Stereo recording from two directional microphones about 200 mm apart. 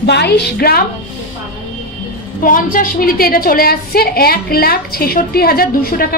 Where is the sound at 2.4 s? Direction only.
45° left (ahead or behind).